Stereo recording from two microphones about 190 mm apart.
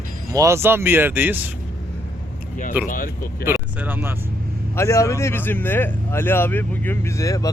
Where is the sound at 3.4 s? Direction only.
10° right (ahead or behind).